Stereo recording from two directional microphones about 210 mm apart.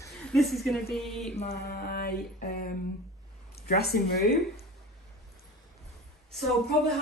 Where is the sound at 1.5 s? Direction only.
50° left (ahead or behind).